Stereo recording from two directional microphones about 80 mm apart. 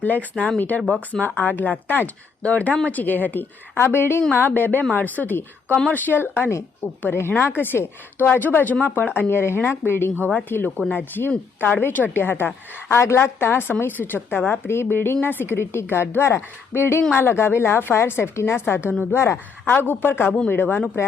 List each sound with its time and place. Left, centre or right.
0.0 s a woman's voice: left